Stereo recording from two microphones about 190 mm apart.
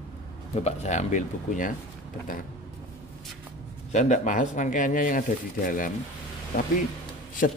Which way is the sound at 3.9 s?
40° left (ahead or behind).